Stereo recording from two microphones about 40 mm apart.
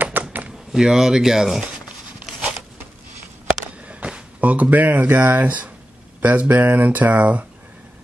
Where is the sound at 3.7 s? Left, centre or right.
Right.